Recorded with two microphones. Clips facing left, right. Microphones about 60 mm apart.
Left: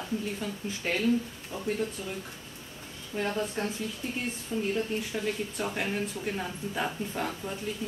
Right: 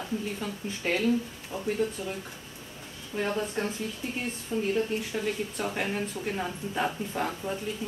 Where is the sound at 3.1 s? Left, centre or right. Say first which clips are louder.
Right 1 dB; centre.